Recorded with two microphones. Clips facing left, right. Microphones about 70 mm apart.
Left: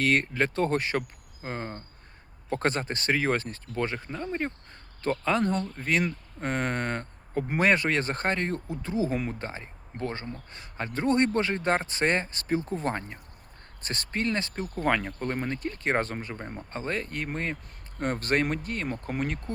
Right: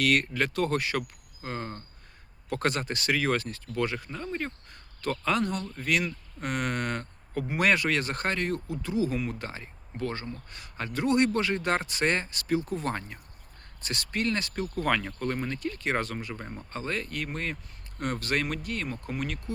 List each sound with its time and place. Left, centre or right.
0.0 s speech: left
4.1 s speech: centre; by 16.3 s left
16.3 s speech: centre; by 19.5 s left